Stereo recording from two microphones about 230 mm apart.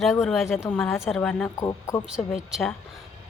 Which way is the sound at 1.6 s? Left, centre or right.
Centre.